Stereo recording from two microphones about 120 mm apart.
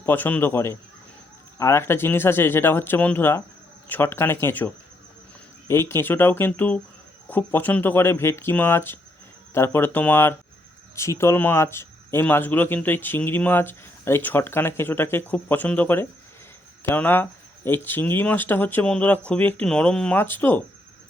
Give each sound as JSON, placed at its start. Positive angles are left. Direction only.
{"t": 0.0, "sound": "speech", "side_deg": 15}